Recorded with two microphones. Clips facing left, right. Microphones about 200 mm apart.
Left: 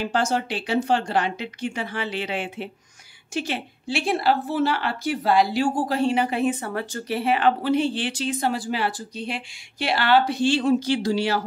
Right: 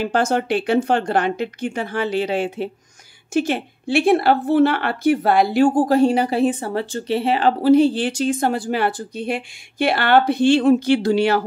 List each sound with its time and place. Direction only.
0.0 s speech: 55° right (ahead or behind)